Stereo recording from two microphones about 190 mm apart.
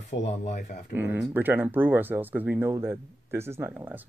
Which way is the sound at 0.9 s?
10° right (ahead or behind).